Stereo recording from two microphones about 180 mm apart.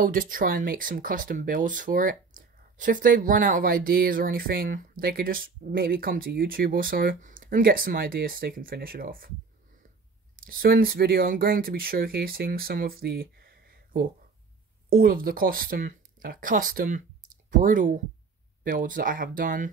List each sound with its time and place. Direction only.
0.0 s speech: 50° right (ahead or behind)
10.3 s speech: 55° right (ahead or behind)